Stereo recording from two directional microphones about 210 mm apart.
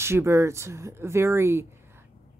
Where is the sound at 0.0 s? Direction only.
10° right (ahead or behind).